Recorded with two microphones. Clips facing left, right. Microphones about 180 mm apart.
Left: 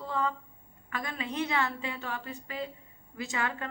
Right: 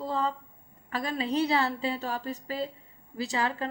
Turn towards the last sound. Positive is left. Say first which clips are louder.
# right 4 dB
turn(degrees=-35)  # may be behind; listen again after turning